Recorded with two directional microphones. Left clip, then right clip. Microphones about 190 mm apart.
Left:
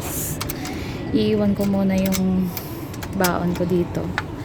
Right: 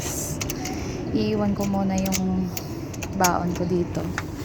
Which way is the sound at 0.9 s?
25° left (ahead or behind).